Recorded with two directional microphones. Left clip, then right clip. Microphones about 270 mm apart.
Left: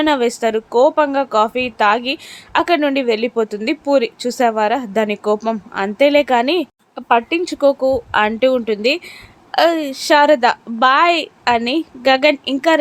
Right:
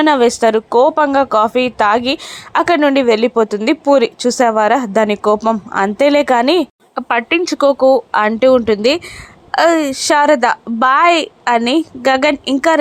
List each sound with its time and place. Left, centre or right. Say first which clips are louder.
0.0 s speech: right 5 dB; centre